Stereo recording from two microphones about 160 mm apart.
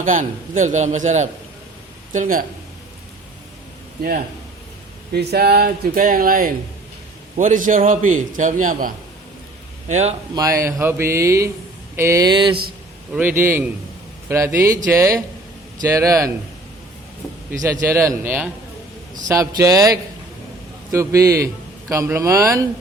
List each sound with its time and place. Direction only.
0.0 s a man's voice: 55° right (ahead or behind)
5.1 s a man's voice: 80° right; by 8.9 s 55° right (ahead or behind)
9.9 s a man's voice: 45° right (ahead or behind)
10.3 s a man's voice: 20° right (ahead or behind)
13.1 s a man's voice: 10° right (ahead or behind)
17.5 s a man's voice: 20° right (ahead or behind)